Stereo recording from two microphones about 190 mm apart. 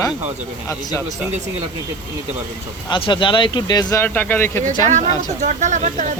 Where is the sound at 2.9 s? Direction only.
25° left (ahead or behind).